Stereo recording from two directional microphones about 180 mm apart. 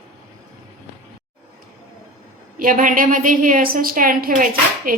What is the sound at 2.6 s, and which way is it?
A woman's voice, 50° right (ahead or behind).